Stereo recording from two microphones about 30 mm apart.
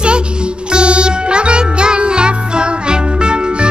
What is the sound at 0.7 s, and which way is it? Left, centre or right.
Music, right.